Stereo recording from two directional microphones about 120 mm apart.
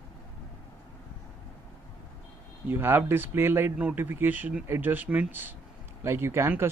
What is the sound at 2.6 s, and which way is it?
Speech, 20° right (ahead or behind).